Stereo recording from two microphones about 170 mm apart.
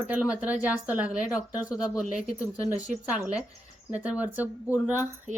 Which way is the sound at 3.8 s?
10° right (ahead or behind).